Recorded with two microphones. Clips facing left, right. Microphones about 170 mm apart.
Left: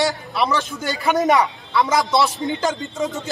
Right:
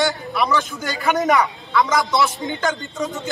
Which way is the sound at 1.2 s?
25° left (ahead or behind).